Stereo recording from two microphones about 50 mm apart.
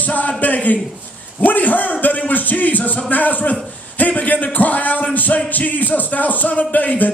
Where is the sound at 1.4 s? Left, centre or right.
Left.